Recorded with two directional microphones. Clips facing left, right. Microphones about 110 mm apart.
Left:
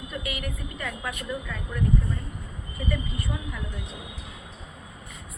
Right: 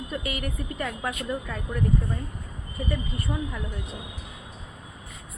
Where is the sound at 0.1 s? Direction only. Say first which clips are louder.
Right 1 dB; 40° right (ahead or behind).